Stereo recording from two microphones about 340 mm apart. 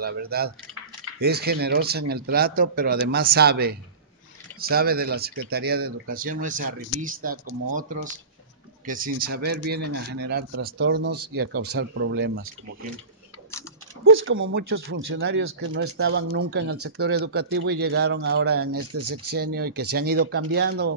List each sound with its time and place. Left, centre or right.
0.0 s speech: right
8.8 s speech: right
14.0 s a sound: right
14.5 s speech: right
18.7 s speech: right
19.3 s speech: right